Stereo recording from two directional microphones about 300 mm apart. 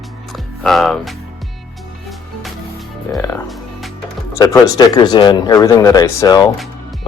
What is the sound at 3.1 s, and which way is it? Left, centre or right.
Speech, centre.